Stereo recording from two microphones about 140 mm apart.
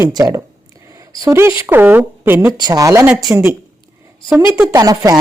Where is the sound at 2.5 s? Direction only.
25° right (ahead or behind).